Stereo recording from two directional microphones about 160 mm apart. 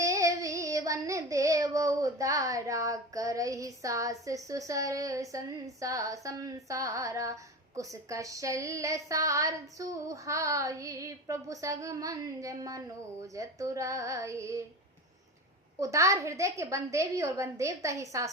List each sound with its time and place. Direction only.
0.0 s child singing: 20° right (ahead or behind)
15.8 s child singing: 20° right (ahead or behind)